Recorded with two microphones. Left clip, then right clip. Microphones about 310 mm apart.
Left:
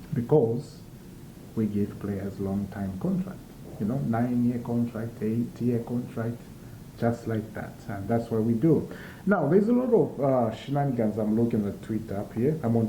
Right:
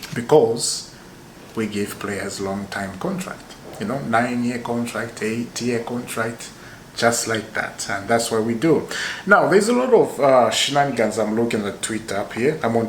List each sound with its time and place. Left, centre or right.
0.0 s a sound: centre
0.3 s speech: right
1.5 s speech: centre